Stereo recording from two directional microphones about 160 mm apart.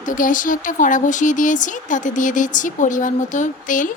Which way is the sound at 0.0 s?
55° left (ahead or behind).